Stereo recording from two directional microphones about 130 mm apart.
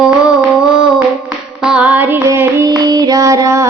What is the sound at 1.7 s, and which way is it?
Child singing, 10° right (ahead or behind).